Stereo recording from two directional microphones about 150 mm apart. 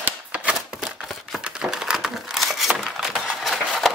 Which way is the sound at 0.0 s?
10° right (ahead or behind).